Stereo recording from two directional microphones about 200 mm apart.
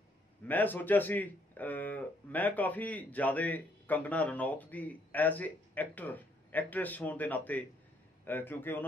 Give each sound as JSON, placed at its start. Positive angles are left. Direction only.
{"t": 0.5, "sound": "speech", "side_deg": 10}